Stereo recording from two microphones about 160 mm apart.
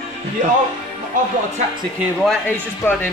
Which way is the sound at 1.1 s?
55° right (ahead or behind).